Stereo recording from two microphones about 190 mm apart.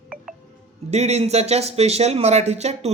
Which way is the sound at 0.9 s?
35° right (ahead or behind).